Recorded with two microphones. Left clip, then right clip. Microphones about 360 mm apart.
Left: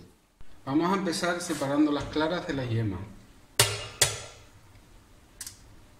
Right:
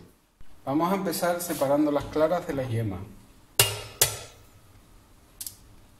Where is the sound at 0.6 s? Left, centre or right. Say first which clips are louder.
Right 1 dB; centre.